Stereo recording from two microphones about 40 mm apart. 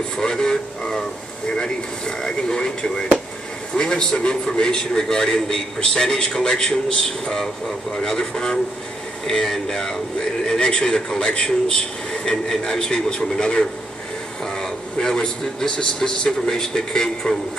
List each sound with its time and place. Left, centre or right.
0.2 s a man's voice: centre